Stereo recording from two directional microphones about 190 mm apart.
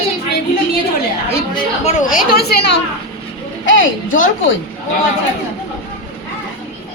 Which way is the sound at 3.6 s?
85° left.